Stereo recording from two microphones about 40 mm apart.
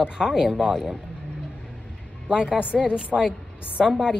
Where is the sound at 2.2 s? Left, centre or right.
Right.